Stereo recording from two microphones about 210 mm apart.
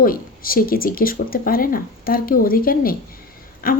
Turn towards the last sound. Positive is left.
turn(degrees=45)  # may be behind; listen again after turning